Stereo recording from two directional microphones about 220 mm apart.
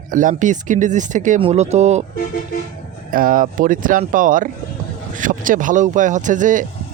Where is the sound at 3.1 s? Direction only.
40° right (ahead or behind).